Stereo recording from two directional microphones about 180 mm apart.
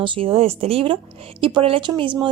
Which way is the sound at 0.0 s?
30° right (ahead or behind).